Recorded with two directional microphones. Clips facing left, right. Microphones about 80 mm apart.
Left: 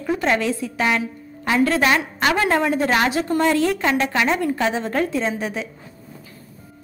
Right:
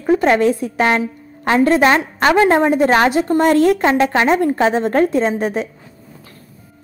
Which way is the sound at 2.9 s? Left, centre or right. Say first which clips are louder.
Right 6 dB; right.